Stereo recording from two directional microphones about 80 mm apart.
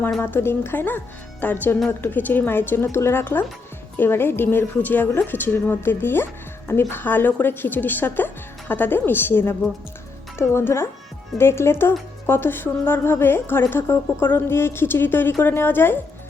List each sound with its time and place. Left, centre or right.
0.2 s a woman's voice: left